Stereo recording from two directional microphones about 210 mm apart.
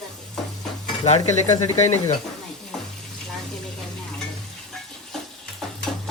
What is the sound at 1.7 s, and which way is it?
Speech, 35° left (ahead or behind).